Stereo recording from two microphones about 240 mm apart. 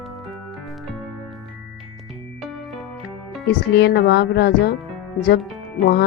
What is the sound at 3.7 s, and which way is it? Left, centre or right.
Speech, left.